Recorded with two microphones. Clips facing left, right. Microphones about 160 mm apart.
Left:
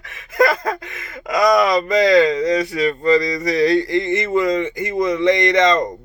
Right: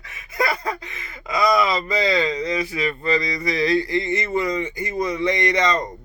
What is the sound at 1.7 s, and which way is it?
Speech, 75° left (ahead or behind).